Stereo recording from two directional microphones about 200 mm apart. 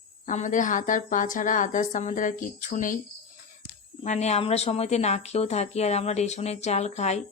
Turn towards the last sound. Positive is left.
turn(degrees=35)  # may be behind; listen again after turning